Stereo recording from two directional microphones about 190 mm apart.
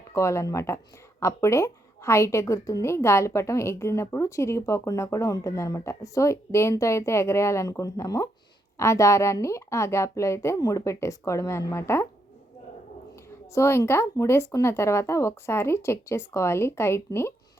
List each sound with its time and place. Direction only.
0.1 s a woman's voice: 15° left (ahead or behind)
13.5 s a woman's voice: 15° left (ahead or behind)